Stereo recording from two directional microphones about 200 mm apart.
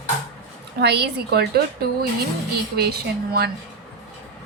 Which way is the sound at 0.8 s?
55° right (ahead or behind).